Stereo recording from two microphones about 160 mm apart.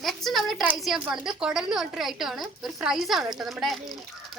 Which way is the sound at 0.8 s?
5° right (ahead or behind).